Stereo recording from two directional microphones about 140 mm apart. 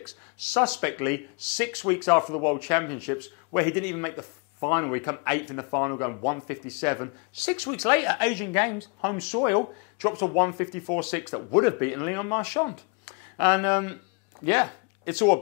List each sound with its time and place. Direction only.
0.5 s speech: 15° left (ahead or behind)